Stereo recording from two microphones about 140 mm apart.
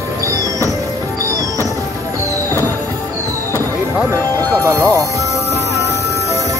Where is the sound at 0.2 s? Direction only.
20° right (ahead or behind).